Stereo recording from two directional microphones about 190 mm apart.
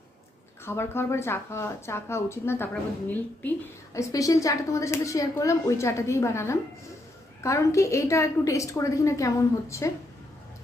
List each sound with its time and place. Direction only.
0.6 s speech: 10° left (ahead or behind)
3.9 s speech: 20° left (ahead or behind)